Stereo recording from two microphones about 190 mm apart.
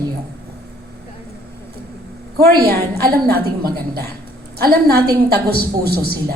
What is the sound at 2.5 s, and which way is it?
A woman's voice, 55° right (ahead or behind).